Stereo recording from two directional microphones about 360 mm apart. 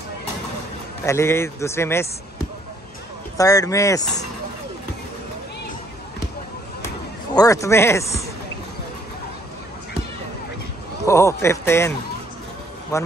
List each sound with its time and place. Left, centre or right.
1.0 s speech: centre
3.3 s speech: centre
4.0 s speech: centre
7.3 s speech: centre
11.1 s speech: centre
12.9 s speech: centre